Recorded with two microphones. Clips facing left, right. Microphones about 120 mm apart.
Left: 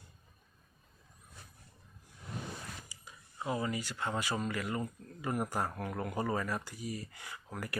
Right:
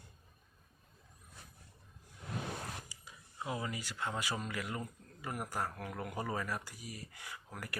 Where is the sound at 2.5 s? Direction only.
55° right (ahead or behind).